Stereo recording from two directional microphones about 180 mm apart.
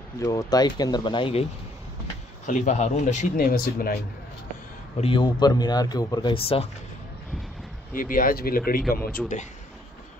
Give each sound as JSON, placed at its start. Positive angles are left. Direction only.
{"t": 0.2, "sound": "speech", "side_deg": 20}
{"t": 2.4, "sound": "speech", "side_deg": 45}
{"t": 5.0, "sound": "speech", "side_deg": 25}
{"t": 7.9, "sound": "speech", "side_deg": 50}